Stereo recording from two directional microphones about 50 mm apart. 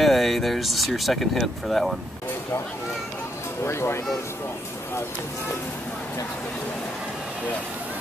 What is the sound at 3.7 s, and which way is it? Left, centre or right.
Speech, left.